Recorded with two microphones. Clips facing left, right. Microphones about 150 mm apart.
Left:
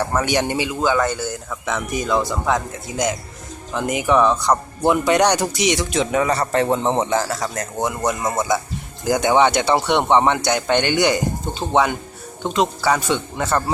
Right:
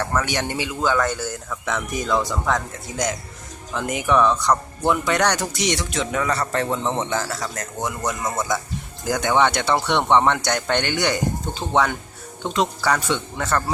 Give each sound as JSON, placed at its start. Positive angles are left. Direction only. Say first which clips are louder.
{"t": 0.0, "sound": "speech", "louder": "left 4 dB", "side_deg": 20}
{"t": 6.7, "sound": "speech", "louder": "left 5 dB", "side_deg": 35}